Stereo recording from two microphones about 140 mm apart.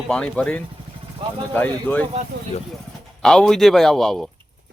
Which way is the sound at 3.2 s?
5° left (ahead or behind).